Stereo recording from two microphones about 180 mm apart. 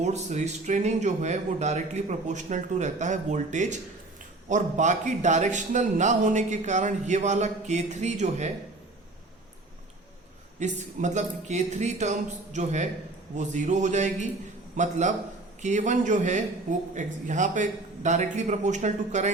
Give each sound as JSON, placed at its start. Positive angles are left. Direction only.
{"t": 0.0, "sound": "a man's voice", "side_deg": -40}
{"t": 10.6, "sound": "a man's voice", "side_deg": -40}